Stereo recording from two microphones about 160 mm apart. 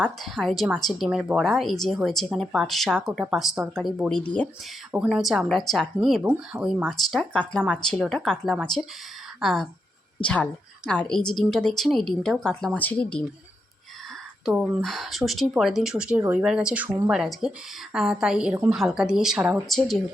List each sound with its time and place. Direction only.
0.0 s a woman's voice: centre (ahead or behind)
4.9 s a woman's voice: 5° right (ahead or behind)
14.8 s speech: centre (ahead or behind)